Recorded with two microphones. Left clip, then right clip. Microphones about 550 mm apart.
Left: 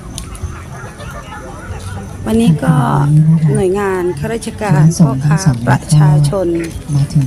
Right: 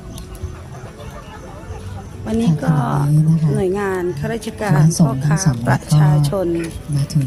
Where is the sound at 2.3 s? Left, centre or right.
Right.